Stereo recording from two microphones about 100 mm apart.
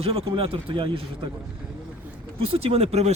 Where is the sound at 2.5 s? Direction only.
80° right.